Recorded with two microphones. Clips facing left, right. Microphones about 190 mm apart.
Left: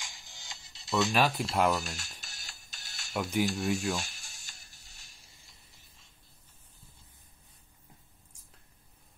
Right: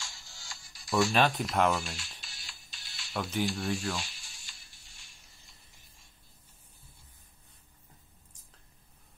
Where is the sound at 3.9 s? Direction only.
45° left (ahead or behind).